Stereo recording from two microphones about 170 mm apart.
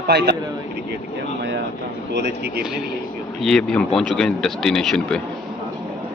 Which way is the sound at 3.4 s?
5° left (ahead or behind).